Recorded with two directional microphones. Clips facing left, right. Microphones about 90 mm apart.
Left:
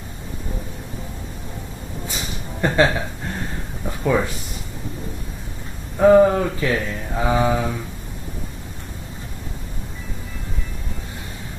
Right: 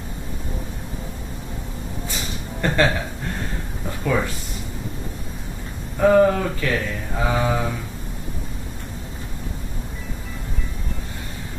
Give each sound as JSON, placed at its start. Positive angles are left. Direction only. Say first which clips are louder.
{"t": 2.6, "sound": "speech", "louder": "left 2 dB", "side_deg": 15}
{"t": 4.0, "sound": "speech", "louder": "left 3 dB", "side_deg": 15}
{"t": 5.9, "sound": "speech", "louder": "left 3 dB", "side_deg": 15}